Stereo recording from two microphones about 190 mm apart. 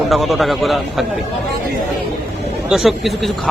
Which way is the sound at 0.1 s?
Centre (ahead or behind).